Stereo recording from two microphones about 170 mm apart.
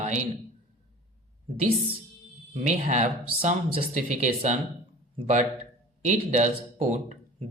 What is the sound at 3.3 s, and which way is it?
Speech, 35° right (ahead or behind).